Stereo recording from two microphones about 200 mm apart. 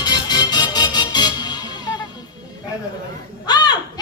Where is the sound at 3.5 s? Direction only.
20° left (ahead or behind).